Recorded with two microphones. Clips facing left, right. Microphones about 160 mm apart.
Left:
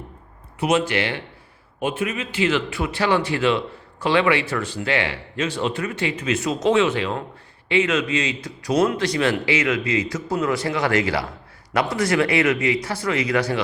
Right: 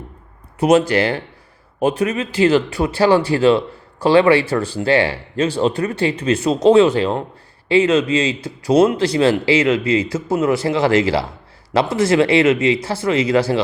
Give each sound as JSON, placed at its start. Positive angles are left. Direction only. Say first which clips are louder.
{"t": 0.6, "sound": "speech", "louder": "right 7 dB", "side_deg": -40}